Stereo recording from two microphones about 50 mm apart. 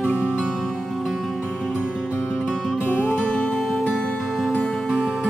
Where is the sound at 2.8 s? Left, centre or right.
Left.